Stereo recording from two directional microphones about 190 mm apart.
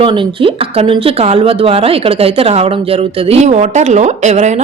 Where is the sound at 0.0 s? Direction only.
25° right (ahead or behind).